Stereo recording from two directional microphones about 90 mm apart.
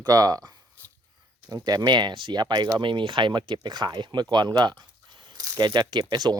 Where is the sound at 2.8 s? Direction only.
65° right (ahead or behind).